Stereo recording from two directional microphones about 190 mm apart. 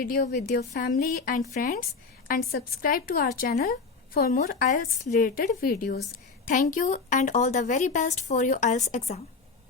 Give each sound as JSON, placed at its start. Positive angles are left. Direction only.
{"t": 0.0, "sound": "a woman's voice", "side_deg": 50}
{"t": 6.5, "sound": "a woman's voice", "side_deg": 40}